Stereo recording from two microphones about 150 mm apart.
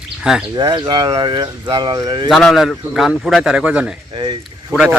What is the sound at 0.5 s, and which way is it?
Speech, 25° right (ahead or behind).